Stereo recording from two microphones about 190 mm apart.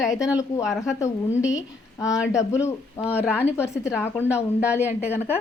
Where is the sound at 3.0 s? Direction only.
5° right (ahead or behind).